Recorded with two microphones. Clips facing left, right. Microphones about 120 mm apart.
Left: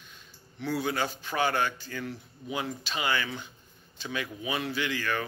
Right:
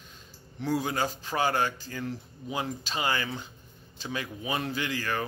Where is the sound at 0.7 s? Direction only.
35° right (ahead or behind).